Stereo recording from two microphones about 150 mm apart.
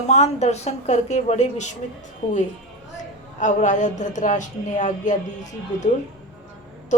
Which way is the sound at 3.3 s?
55° left (ahead or behind).